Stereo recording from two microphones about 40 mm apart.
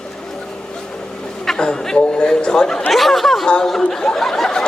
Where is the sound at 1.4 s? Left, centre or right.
Centre.